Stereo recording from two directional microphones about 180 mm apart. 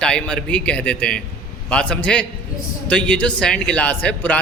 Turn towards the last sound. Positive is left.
turn(degrees=10)  # may be behind; listen again after turning